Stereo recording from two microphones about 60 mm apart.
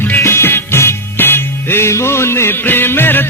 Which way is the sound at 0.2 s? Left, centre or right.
Left.